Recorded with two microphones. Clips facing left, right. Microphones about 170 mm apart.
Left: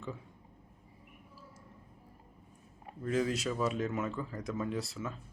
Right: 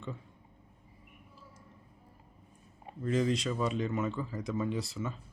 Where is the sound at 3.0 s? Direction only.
5° left (ahead or behind).